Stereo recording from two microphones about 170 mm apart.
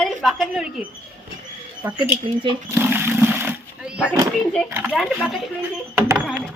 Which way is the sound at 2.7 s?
10° right (ahead or behind).